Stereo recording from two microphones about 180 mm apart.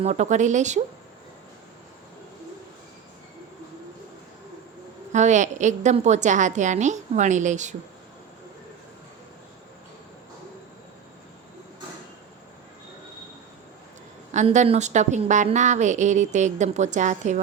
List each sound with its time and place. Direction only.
0.0 s a woman's voice: 40° right (ahead or behind)
5.1 s a woman's voice: 40° right (ahead or behind)
14.3 s a woman's voice: 40° right (ahead or behind)